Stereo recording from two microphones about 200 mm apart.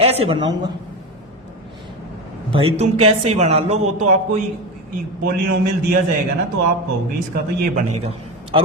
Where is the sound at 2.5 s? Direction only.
25° right (ahead or behind).